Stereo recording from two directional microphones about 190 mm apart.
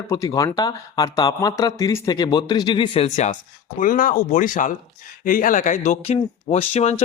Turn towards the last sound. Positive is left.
turn(degrees=35)  # may be behind; listen again after turning